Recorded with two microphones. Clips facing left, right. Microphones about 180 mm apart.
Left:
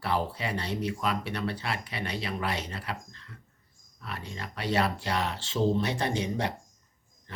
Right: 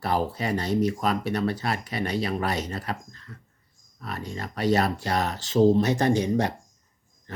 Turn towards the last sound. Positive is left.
turn(degrees=-45)  # may be behind; listen again after turning